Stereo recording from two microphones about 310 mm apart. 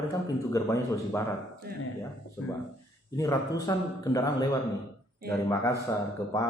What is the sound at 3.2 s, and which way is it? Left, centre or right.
A man's voice, centre.